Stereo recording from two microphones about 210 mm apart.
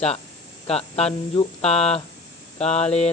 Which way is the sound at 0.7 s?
30° left (ahead or behind).